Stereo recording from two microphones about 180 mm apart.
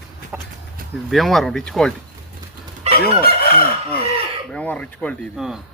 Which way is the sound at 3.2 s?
55° left (ahead or behind).